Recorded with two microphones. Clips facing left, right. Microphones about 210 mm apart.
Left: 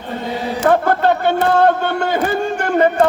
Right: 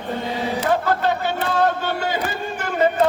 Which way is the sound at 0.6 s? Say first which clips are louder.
Left 7 dB; 55° left (ahead or behind).